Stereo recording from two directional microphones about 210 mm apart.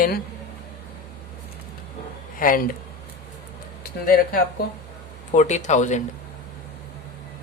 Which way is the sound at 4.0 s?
45° left (ahead or behind).